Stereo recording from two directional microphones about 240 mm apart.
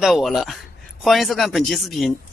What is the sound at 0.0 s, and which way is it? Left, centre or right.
Speech, centre.